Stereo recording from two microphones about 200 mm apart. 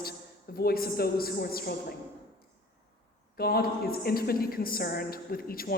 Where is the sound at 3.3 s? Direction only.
50° left (ahead or behind).